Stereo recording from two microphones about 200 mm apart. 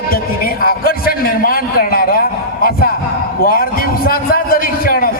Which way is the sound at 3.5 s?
45° left (ahead or behind).